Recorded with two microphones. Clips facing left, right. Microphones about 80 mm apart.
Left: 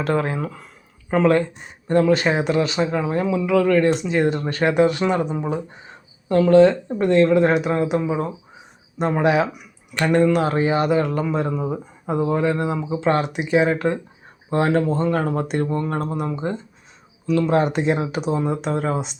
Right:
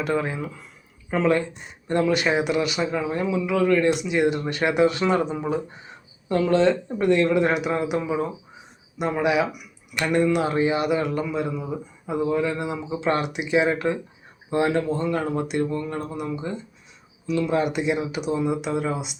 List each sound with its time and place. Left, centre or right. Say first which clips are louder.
0.2 s speech: left 4 dB; left
2.0 s speech: left 4 dB; left
3.3 s speech: left 3 dB; left
4.9 s speech: left 1 dB; left
6.6 s speech: left 6 dB; left
9.0 s speech: left 3 dB; left